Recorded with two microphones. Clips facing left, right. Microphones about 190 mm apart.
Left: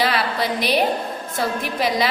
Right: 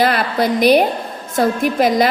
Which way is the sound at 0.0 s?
50° right (ahead or behind).